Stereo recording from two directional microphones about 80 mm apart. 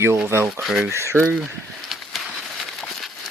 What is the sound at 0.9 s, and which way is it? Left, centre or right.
Speech, right.